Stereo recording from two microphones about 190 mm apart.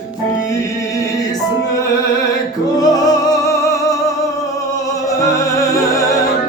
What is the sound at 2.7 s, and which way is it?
Music, 20° left (ahead or behind).